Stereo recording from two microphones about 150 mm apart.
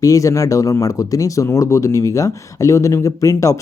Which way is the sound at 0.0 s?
20° left (ahead or behind).